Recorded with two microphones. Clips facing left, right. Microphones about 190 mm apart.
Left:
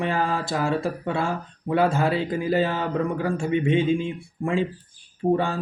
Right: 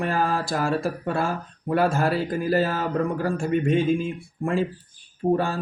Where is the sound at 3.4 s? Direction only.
20° left (ahead or behind).